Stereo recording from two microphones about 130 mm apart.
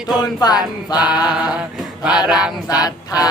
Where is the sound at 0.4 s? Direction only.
30° left (ahead or behind).